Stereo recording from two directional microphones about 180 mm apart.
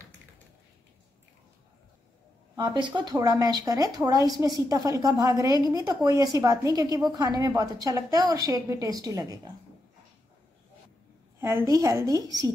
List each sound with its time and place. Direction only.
2.5 s a woman's voice: 25° right (ahead or behind)
11.3 s a woman's voice: 15° right (ahead or behind)